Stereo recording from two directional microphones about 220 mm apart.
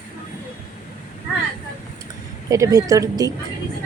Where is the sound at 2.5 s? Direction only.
15° right (ahead or behind).